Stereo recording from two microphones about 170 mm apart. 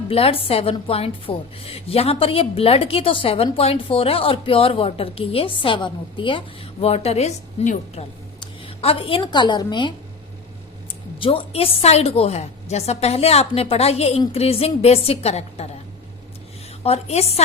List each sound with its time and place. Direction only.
0.1 s a woman's voice: 35° left (ahead or behind)
8.4 s a woman's voice: 35° left (ahead or behind)
11.2 s a woman's voice: 35° left (ahead or behind)
16.8 s a woman's voice: 40° left (ahead or behind)